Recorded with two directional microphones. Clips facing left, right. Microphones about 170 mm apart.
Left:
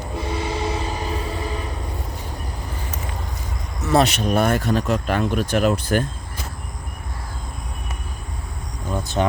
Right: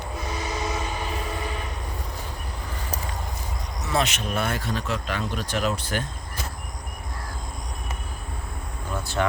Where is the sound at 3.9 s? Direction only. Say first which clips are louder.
Left 8 dB; 35° left (ahead or behind).